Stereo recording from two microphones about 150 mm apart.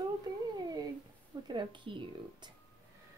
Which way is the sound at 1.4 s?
30° right (ahead or behind).